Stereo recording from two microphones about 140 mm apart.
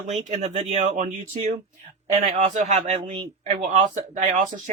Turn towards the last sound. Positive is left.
turn(degrees=-60)  # may be behind; listen again after turning